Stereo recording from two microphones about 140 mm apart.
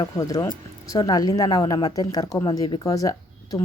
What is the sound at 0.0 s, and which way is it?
Speech, 25° left (ahead or behind).